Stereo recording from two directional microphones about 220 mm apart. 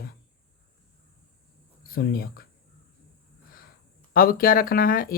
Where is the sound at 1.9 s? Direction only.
45° left (ahead or behind).